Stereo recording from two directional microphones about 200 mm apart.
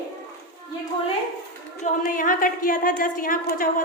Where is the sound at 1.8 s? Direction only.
40° left (ahead or behind).